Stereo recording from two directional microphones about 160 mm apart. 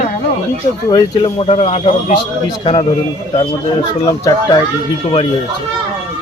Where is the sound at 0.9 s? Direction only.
25° left (ahead or behind).